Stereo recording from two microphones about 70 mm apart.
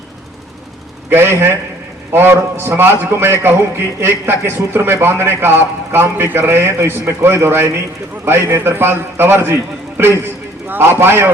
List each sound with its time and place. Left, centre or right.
1.1 s a man's voice: right